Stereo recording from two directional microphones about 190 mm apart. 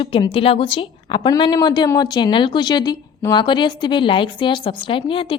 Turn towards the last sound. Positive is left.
turn(degrees=25)  # may be behind; listen again after turning